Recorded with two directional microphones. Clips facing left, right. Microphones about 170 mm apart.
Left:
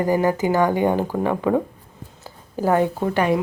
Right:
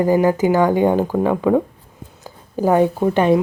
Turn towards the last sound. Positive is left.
turn(degrees=-20)  # may be behind; listen again after turning